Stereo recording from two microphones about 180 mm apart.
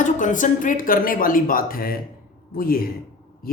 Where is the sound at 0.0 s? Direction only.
45° left (ahead or behind).